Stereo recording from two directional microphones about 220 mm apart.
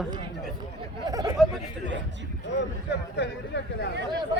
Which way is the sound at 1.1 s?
15° right (ahead or behind).